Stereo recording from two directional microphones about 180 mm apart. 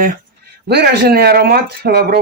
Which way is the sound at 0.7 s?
60° right (ahead or behind).